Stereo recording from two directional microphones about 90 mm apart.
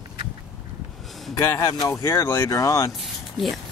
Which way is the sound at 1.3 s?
35° left (ahead or behind).